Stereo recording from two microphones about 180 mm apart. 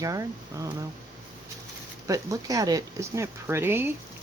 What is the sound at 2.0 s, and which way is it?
Speech, 20° right (ahead or behind).